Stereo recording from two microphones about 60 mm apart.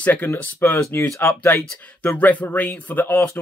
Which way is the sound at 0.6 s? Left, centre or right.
Left.